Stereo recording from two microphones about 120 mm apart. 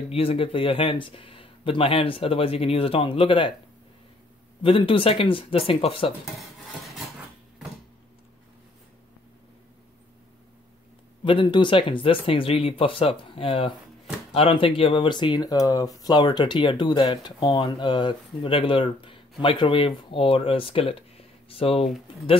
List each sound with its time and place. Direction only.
0.1 s speech: 55° left (ahead or behind)
4.6 s speech: 45° left (ahead or behind)
11.2 s speech: 40° left (ahead or behind)